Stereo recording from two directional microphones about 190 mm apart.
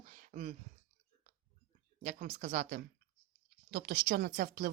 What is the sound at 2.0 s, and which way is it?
Speech, 40° right (ahead or behind).